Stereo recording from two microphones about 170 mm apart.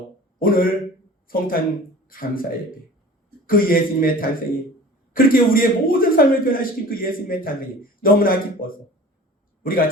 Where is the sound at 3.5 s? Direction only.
60° left (ahead or behind).